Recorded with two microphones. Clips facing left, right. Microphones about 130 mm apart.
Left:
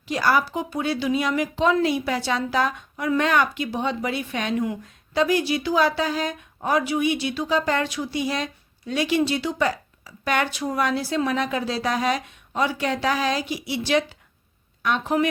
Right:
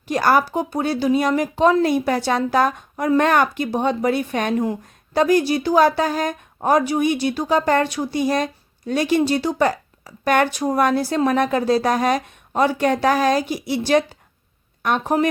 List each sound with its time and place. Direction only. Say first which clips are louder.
0.1 s a woman's voice: right 4 dB; 50° right (ahead or behind)